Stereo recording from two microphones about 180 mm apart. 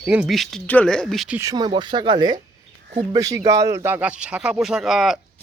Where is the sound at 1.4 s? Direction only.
20° right (ahead or behind).